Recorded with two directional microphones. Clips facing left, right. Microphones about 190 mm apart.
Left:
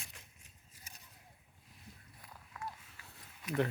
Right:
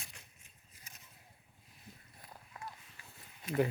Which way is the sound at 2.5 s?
30° right (ahead or behind).